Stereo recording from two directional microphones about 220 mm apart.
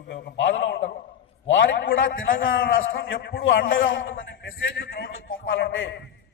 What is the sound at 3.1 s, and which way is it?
A man's voice, 45° left (ahead or behind).